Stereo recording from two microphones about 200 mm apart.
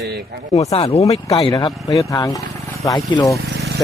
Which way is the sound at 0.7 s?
30° left (ahead or behind).